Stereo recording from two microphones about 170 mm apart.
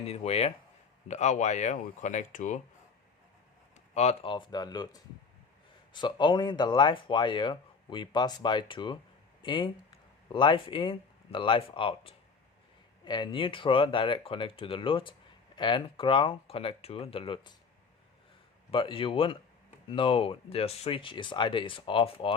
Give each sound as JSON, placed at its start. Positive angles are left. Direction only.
{"t": 0.1, "sound": "speech", "side_deg": 35}
{"t": 3.9, "sound": "speech", "side_deg": 40}
{"t": 18.7, "sound": "speech", "side_deg": 30}